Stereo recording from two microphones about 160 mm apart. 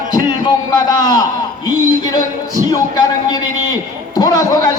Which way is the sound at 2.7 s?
25° left (ahead or behind).